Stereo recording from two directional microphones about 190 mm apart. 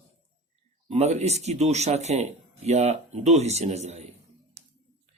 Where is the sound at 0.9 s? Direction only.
35° right (ahead or behind).